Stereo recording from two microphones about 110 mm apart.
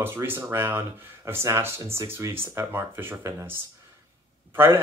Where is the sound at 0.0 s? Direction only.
20° right (ahead or behind).